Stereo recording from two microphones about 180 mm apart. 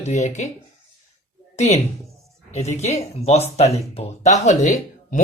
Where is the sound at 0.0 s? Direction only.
40° left (ahead or behind).